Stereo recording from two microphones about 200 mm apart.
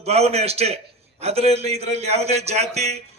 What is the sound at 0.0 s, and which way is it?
A man's voice, 30° right (ahead or behind).